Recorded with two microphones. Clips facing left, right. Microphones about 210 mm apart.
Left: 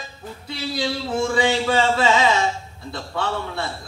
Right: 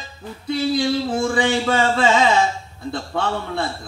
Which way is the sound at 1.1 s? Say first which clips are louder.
Right 1 dB; 50° right (ahead or behind).